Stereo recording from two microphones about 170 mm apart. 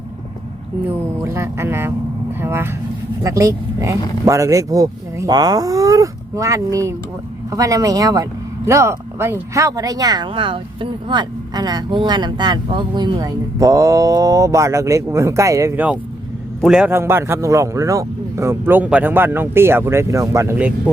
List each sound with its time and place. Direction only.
0.9 s a man's voice: 15° right (ahead or behind)